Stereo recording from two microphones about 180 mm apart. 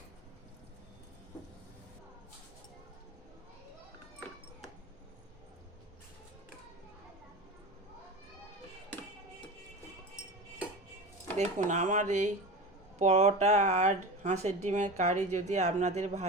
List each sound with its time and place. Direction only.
11.3 s speech: 40° right (ahead or behind)